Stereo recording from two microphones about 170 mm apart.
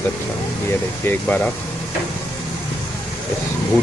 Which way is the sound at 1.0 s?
10° left (ahead or behind).